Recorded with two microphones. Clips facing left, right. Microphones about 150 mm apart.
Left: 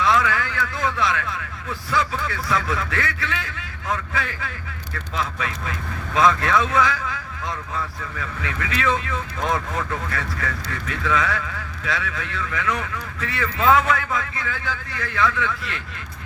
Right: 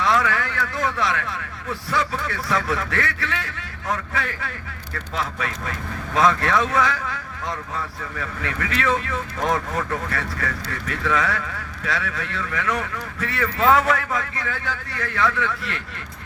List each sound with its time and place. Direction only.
0.0 s a sound: 40° right (ahead or behind)
2.2 s speech: 40° right (ahead or behind)
8.2 s speech: 45° right (ahead or behind)